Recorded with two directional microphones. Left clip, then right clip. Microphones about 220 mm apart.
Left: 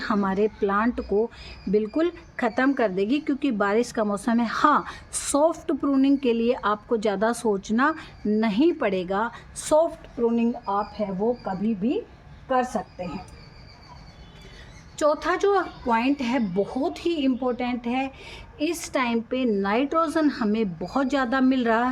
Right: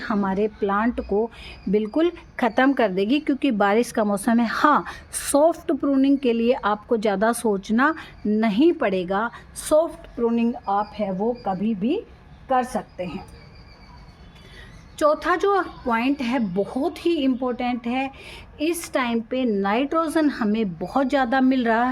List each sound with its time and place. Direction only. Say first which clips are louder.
0.0 s a woman's voice: even; 10° right (ahead or behind)
14.9 s a woman's voice: right 3 dB; 15° right (ahead or behind)